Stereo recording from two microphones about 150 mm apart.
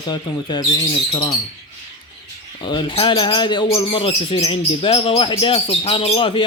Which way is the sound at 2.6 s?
30° left (ahead or behind).